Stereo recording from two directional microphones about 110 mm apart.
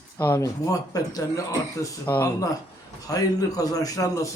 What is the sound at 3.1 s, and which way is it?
Speech, 30° left (ahead or behind).